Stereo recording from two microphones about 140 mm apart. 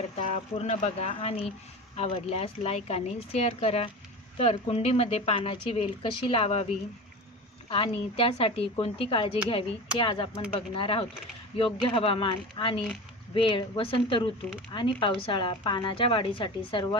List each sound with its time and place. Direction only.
0.2 s speech: 55° left (ahead or behind)
7.7 s a woman's voice: 40° left (ahead or behind)